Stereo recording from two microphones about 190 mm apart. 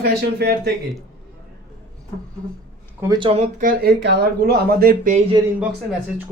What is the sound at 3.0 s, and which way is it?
Speech, 25° right (ahead or behind).